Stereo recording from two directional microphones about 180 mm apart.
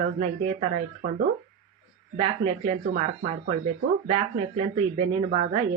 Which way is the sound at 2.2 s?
30° right (ahead or behind).